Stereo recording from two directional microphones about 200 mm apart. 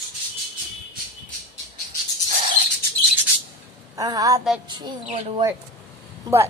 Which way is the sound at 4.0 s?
20° right (ahead or behind).